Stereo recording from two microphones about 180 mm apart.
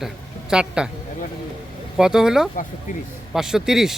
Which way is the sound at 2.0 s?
5° right (ahead or behind).